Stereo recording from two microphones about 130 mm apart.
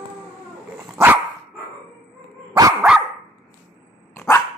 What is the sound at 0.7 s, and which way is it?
Dog, 15° right (ahead or behind).